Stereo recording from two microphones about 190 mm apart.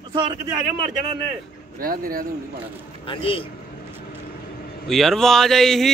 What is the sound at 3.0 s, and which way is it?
Speech, 30° left (ahead or behind).